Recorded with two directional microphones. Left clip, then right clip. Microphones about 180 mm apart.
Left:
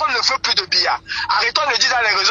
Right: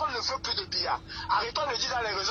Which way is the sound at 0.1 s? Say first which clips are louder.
Left 14 dB; 45° left (ahead or behind).